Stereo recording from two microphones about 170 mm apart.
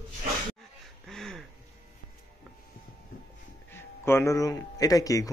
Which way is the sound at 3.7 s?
15° left (ahead or behind).